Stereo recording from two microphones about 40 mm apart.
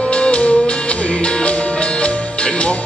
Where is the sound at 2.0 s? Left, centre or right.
Left.